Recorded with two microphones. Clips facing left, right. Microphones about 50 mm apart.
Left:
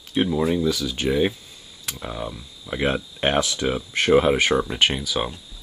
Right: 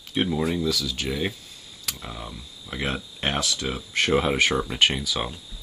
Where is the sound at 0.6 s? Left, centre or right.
Centre.